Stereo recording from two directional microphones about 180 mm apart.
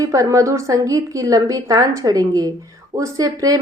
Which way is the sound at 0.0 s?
20° right (ahead or behind).